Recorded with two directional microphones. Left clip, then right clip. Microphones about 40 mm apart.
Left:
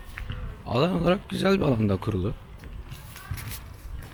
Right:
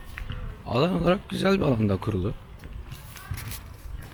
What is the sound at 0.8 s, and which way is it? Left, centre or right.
Speech, left.